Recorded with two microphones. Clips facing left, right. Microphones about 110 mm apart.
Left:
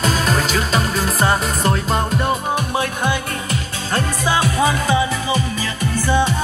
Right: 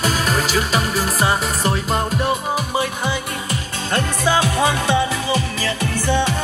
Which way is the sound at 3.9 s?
65° right (ahead or behind).